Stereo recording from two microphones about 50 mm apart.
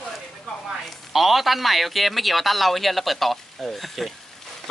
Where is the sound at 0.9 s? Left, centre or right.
Centre.